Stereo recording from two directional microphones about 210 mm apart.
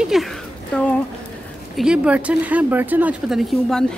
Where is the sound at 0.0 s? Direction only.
Centre (ahead or behind).